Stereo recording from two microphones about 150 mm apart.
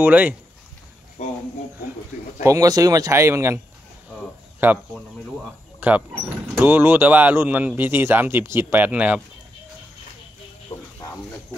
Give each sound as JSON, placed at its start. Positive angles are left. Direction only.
{"t": 0.0, "sound": "speech", "side_deg": -10}
{"t": 1.2, "sound": "speech", "side_deg": 50}
{"t": 2.4, "sound": "speech", "side_deg": -25}
{"t": 10.7, "sound": "a sound", "side_deg": 45}